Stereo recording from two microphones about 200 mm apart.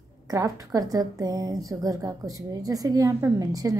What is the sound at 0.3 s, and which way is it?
Speech, 15° right (ahead or behind).